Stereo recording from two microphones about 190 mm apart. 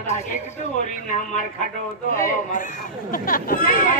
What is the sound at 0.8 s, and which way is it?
Speech, 45° left (ahead or behind).